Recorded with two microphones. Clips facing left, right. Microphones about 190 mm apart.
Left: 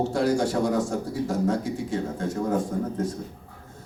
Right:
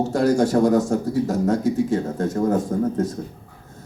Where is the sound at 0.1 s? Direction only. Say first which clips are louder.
Right 5 dB; 40° right (ahead or behind).